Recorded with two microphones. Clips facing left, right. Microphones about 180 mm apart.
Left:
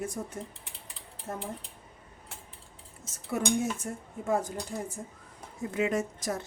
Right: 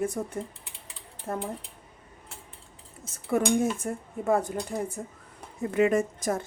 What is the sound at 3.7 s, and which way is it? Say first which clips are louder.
A woman's voice: right 5 dB; 60° right (ahead or behind).